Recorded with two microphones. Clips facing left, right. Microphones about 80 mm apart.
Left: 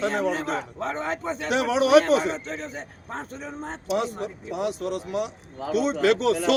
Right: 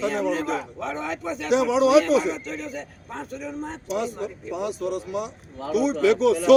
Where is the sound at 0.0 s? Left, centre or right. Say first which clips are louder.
Right 1 dB; left.